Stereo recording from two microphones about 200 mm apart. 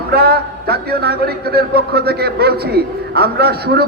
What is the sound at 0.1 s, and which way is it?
A man's voice, 50° right (ahead or behind).